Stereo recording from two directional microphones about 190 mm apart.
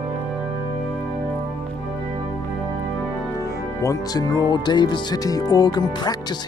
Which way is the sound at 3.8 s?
20° left (ahead or behind).